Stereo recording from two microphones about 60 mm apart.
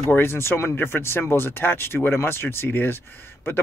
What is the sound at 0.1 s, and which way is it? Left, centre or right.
Speech, left.